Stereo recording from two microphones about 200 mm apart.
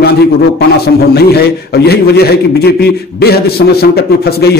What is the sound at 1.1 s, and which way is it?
A man's voice, 50° left (ahead or behind).